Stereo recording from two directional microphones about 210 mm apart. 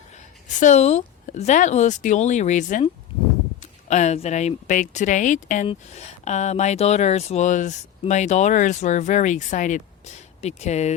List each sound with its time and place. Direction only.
0.6 s speech: 35° left (ahead or behind)